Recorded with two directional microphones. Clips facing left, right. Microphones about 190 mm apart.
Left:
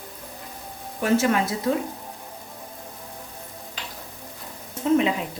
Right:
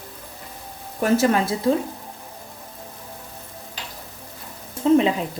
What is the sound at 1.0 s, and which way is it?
Speech, 40° right (ahead or behind).